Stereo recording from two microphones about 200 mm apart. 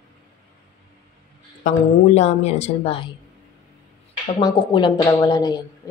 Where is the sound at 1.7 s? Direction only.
35° left (ahead or behind).